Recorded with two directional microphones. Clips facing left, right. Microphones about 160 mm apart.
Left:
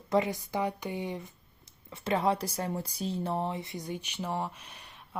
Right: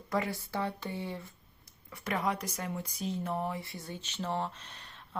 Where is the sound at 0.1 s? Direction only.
20° left (ahead or behind).